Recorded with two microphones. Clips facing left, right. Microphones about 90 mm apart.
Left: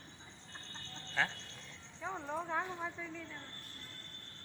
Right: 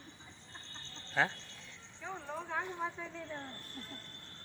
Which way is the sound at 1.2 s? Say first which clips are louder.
Right 3 dB; 10° right (ahead or behind).